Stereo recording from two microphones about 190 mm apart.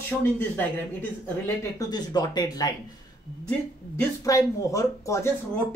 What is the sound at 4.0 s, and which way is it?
Speech, 15° left (ahead or behind).